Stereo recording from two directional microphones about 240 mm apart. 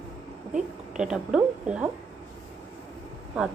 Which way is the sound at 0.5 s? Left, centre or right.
Centre.